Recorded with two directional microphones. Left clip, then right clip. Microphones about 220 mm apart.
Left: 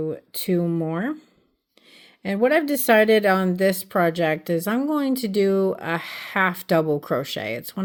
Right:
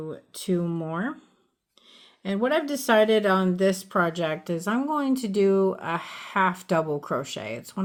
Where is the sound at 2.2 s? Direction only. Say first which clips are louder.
Left 5 dB; 30° left (ahead or behind).